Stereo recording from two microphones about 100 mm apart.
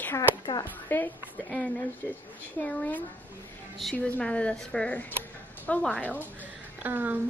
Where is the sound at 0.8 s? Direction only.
20° left (ahead or behind).